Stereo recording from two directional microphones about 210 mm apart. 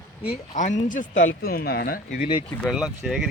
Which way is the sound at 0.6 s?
35° left (ahead or behind).